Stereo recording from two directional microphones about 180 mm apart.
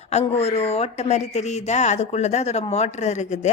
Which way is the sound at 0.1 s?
35° left (ahead or behind).